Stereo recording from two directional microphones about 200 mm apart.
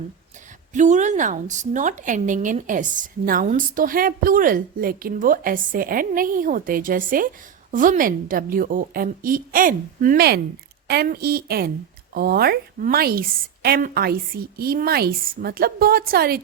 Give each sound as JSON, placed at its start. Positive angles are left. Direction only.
{"t": 0.7, "sound": "a woman's voice", "side_deg": -35}